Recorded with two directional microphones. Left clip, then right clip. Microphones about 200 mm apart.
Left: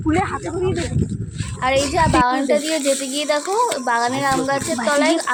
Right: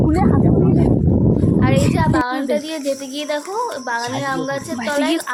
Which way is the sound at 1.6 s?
15° left (ahead or behind).